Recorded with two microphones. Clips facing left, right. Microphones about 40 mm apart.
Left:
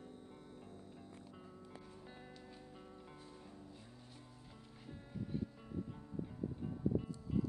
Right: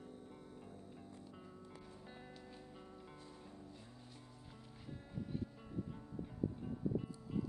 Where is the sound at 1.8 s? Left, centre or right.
Centre.